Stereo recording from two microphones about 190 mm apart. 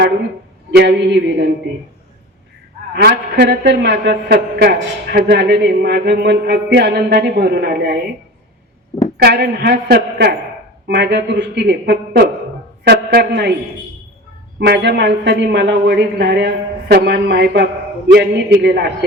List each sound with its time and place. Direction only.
0.8 s a woman's voice: 65° right (ahead or behind)
2.9 s a woman's voice: 55° right (ahead or behind)
9.1 s a woman's voice: 60° right (ahead or behind)
14.6 s a woman's voice: 65° right (ahead or behind)